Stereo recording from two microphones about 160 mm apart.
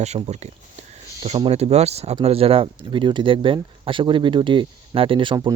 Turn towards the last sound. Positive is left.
turn(degrees=-30)  # may be behind; listen again after turning